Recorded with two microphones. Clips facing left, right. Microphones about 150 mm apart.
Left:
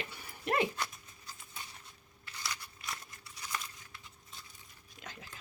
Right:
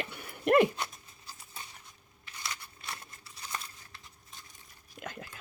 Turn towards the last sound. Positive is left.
turn(degrees=-55)  # may be behind; listen again after turning